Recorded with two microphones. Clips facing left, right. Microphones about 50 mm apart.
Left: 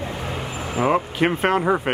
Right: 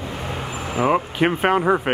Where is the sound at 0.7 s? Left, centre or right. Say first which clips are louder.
Right 1 dB; centre.